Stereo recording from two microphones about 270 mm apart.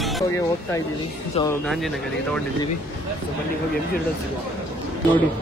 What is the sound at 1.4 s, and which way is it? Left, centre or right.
Speech, centre.